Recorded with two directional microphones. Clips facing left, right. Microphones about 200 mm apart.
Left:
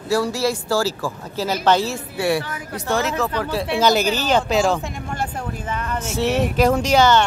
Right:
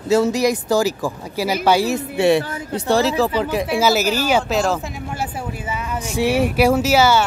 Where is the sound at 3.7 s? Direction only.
5° right (ahead or behind).